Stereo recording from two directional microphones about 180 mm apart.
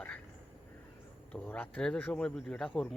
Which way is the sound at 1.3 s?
10° left (ahead or behind).